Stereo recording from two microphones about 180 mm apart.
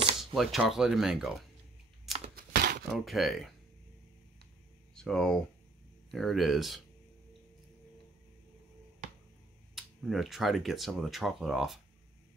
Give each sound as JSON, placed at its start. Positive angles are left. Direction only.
{"t": 0.2, "sound": "speech", "side_deg": 0}
{"t": 2.3, "sound": "a sound", "side_deg": -55}
{"t": 2.9, "sound": "speech", "side_deg": 0}
{"t": 4.9, "sound": "speech", "side_deg": 5}
{"t": 9.8, "sound": "speech", "side_deg": 0}